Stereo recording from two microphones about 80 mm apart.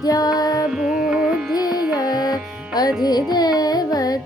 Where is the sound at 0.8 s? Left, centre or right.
Centre.